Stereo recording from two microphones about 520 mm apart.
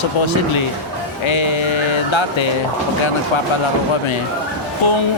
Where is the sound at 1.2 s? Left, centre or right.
Left.